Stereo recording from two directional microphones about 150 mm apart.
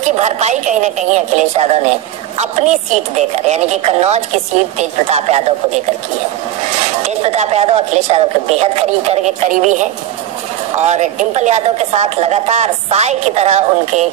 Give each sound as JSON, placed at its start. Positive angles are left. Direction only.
{"t": 0.2, "sound": "speech", "side_deg": -50}
{"t": 7.2, "sound": "speech", "side_deg": -45}